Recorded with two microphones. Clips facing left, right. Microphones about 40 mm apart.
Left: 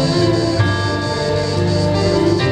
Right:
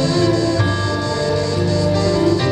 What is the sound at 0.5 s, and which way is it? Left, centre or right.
Music, centre.